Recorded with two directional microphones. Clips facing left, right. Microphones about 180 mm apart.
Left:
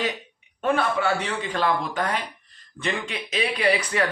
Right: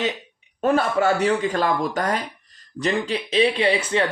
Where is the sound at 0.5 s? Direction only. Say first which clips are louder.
Right 4 dB; 40° right (ahead or behind).